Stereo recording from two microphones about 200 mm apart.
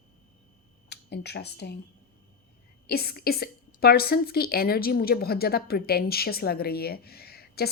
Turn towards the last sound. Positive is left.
turn(degrees=50)  # may be behind; listen again after turning